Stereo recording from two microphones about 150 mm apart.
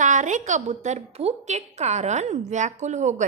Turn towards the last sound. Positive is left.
turn(degrees=-50)  # may be behind; listen again after turning